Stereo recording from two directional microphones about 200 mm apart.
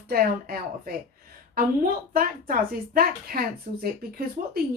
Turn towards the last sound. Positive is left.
turn(degrees=-50)  # may be behind; listen again after turning